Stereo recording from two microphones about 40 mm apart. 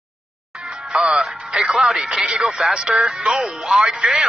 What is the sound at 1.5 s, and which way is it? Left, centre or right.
Speech, centre.